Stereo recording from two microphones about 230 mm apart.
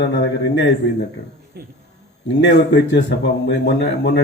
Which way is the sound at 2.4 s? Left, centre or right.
Left.